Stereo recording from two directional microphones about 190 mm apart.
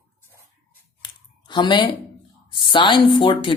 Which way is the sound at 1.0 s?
25° left (ahead or behind).